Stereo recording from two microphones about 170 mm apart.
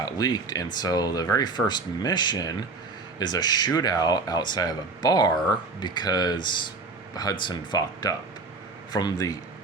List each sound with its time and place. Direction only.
0.0 s speech: 20° left (ahead or behind)